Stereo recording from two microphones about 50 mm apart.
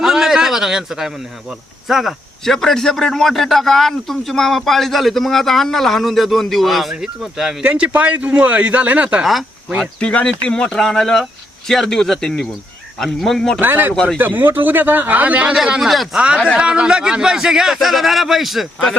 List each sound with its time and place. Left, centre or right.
0.0 s a sound: centre
1.9 s a man's voice: centre
2.4 s a man's voice: centre
7.0 s a man's voice: centre
7.7 s a man's voice: right
10.0 s speech: left
13.6 s speech: right
13.9 s speech: centre
14.2 s speech: right
15.5 s a man's voice: centre
16.2 s a man's voice: centre